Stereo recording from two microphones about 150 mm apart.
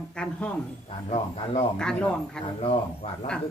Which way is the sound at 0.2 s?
10° left (ahead or behind).